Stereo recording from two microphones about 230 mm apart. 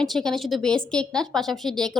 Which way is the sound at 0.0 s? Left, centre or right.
Centre.